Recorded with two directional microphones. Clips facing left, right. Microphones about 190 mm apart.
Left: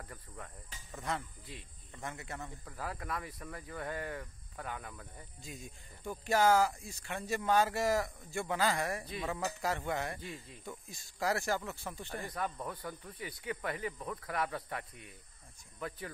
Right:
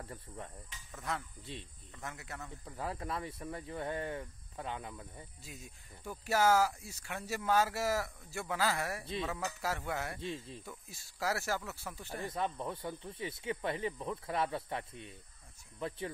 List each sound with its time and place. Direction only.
0.0 s cricket: 25° right (ahead or behind)
0.9 s speech: centre (ahead or behind)
1.4 s speech: 25° right (ahead or behind)
2.0 s speech: centre (ahead or behind)
2.6 s speech: 25° right (ahead or behind)
5.4 s speech: 5° right (ahead or behind)
10.2 s speech: 30° right (ahead or behind)
10.9 s speech: 5° right (ahead or behind)
12.3 s speech: 25° right (ahead or behind)